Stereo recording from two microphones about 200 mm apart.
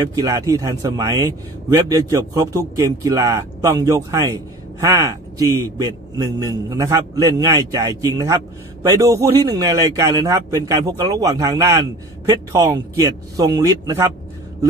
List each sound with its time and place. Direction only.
0.1 s a man's voice: 15° right (ahead or behind)